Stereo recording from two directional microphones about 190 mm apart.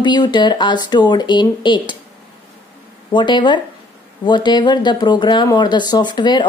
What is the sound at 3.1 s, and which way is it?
Speech, 25° left (ahead or behind).